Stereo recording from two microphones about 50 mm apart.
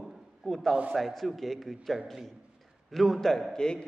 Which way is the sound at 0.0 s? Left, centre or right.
Centre.